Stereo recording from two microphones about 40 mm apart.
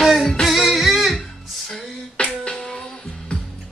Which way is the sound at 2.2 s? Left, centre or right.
Left.